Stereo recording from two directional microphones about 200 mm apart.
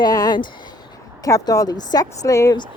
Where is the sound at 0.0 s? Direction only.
20° left (ahead or behind).